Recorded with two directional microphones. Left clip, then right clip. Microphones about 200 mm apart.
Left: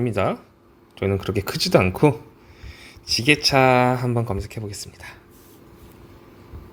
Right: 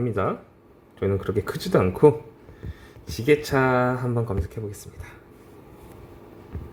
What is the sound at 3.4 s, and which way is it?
Speech, 20° left (ahead or behind).